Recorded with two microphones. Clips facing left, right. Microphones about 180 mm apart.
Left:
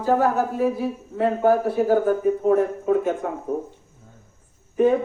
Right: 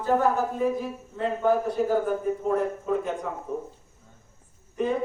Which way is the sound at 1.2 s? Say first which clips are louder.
Left 5 dB; 70° left (ahead or behind).